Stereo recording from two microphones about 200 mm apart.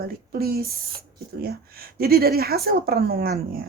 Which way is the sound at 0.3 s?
50° right (ahead or behind).